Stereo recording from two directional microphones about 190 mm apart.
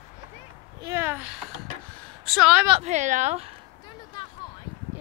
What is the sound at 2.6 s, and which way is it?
Speech, 30° right (ahead or behind).